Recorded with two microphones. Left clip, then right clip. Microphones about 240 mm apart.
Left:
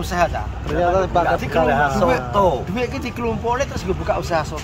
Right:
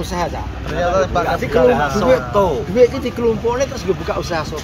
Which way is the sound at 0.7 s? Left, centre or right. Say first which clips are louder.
Right 1 dB; left.